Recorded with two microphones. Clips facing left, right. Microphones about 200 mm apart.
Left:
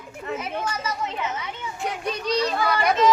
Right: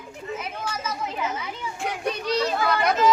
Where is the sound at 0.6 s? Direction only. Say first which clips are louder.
Left 2 dB; 5° right (ahead or behind).